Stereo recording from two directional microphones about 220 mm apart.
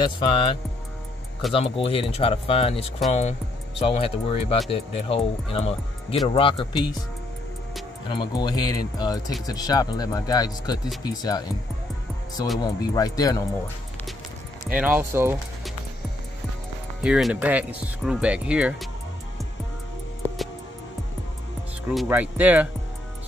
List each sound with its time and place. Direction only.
0.0 s speech: 20° left (ahead or behind)
8.1 s speech: 20° left (ahead or behind)
12.6 s speech: 15° left (ahead or behind)
14.7 s speech: 5° right (ahead or behind)
17.0 s speech: 5° right (ahead or behind)
21.8 s speech: 5° right (ahead or behind)